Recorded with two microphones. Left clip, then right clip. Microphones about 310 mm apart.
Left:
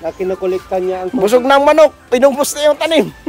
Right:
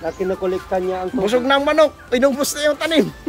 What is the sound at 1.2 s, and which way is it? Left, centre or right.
A man's voice, centre.